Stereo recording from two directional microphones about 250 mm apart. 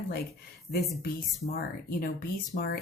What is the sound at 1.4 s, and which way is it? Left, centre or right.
Speech, left.